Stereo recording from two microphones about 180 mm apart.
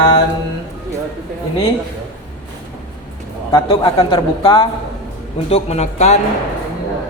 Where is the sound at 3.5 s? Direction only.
20° left (ahead or behind).